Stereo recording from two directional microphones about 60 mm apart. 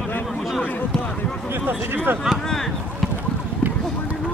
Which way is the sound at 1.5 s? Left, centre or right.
Right.